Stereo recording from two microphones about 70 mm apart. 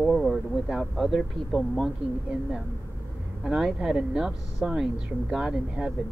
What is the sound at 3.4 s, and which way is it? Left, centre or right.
Speech, centre.